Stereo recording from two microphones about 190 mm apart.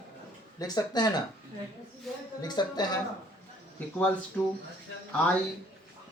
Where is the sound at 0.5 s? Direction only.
20° left (ahead or behind).